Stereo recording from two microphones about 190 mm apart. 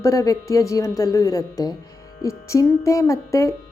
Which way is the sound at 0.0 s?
15° left (ahead or behind).